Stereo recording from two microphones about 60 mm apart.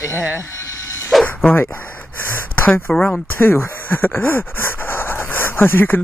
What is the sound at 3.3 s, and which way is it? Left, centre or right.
Speech, left.